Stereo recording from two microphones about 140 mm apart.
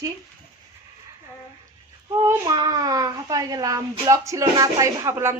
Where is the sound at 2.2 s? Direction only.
25° right (ahead or behind).